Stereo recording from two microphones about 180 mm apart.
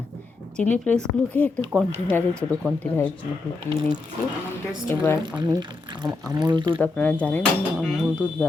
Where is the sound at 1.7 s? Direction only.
5° right (ahead or behind).